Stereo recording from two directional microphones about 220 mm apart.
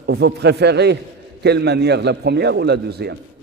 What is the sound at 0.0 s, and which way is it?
A man's voice, 50° right (ahead or behind).